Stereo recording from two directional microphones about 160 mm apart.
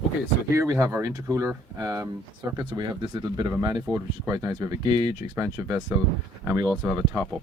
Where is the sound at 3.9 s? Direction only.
5° left (ahead or behind).